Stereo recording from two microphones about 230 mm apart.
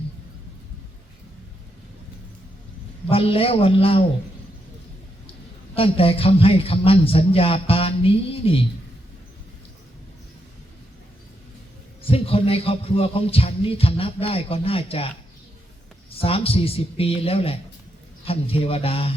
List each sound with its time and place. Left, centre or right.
3.1 s music: left
5.7 s music: left
12.0 s music: left